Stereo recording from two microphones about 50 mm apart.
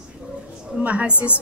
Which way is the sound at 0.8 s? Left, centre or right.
Right.